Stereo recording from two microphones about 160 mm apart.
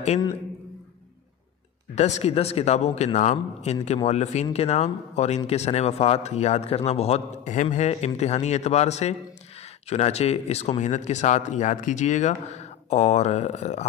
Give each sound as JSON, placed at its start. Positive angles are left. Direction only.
{"t": 2.0, "sound": "a man's voice", "side_deg": 45}